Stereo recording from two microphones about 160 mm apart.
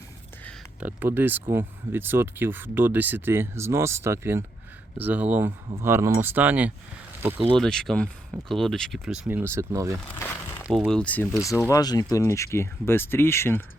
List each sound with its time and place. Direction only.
0.8 s speech: 10° right (ahead or behind)
7.5 s speech: 5° left (ahead or behind)
9.4 s speech: 15° right (ahead or behind)
10.7 s speech: centre (ahead or behind)
11.7 s speech: 25° left (ahead or behind)